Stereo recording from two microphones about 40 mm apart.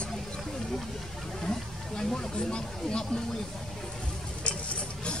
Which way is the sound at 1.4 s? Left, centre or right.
Centre.